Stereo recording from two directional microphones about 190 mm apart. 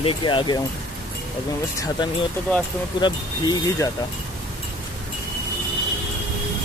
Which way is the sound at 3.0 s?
20° left (ahead or behind).